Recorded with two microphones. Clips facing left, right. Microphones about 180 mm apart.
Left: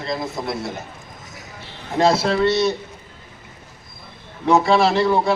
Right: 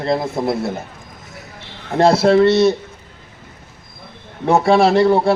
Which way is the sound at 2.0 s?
55° right (ahead or behind).